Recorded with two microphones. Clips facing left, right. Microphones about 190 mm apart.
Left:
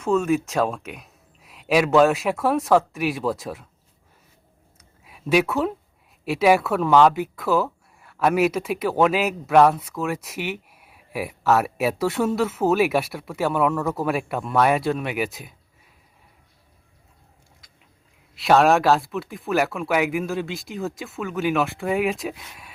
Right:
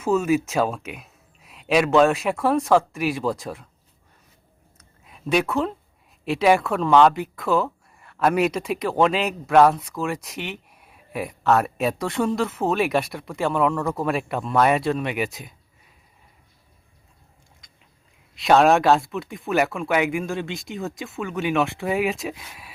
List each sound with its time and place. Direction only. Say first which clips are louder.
0.0 s speech: even; 5° right (ahead or behind)
4.8 s a sound: even; 5° left (ahead or behind)
6.2 s speech: left 1 dB; 5° left (ahead or behind)
17.6 s biting: even; 5° left (ahead or behind)
18.3 s speech: right 1 dB; 5° left (ahead or behind)